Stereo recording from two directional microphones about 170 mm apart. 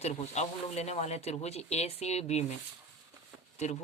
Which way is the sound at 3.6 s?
40° left (ahead or behind).